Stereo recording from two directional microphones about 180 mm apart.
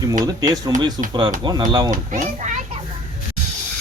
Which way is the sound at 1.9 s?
45° right (ahead or behind).